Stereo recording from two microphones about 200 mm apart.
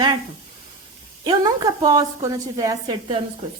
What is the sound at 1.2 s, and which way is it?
A woman's voice, 20° right (ahead or behind).